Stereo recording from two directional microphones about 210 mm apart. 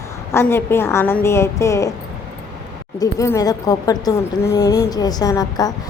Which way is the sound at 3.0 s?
15° left (ahead or behind).